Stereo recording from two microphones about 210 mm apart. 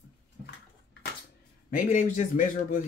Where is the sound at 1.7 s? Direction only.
35° left (ahead or behind).